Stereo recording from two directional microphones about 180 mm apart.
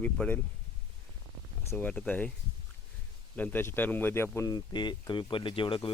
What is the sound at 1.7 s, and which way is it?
Speech, 5° left (ahead or behind).